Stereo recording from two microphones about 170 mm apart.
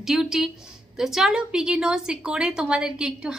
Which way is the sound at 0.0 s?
5° right (ahead or behind).